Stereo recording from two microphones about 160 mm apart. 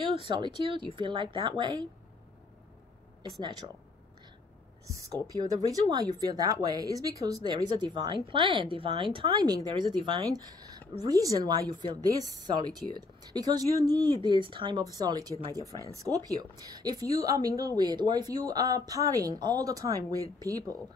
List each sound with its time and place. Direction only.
0.2 s a woman's voice: 30° right (ahead or behind)
3.3 s a woman's voice: 25° right (ahead or behind)
5.3 s a woman's voice: 25° right (ahead or behind)